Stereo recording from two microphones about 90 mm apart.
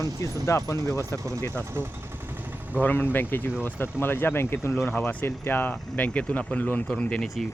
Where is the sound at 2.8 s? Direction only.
20° left (ahead or behind).